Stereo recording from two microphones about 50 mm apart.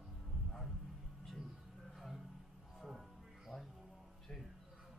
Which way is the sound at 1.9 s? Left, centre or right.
Centre.